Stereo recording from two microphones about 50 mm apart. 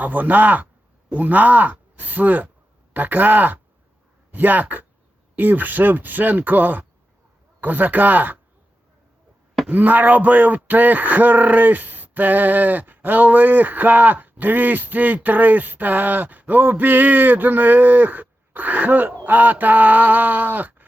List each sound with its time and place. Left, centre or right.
0.0 s speech: right
9.6 s speech: right